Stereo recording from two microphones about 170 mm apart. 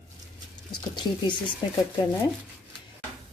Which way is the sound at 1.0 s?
30° left (ahead or behind).